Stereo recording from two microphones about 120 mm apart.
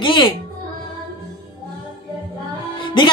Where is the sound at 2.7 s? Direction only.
40° left (ahead or behind).